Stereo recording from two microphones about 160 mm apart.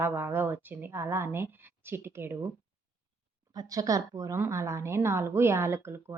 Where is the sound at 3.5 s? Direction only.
25° right (ahead or behind).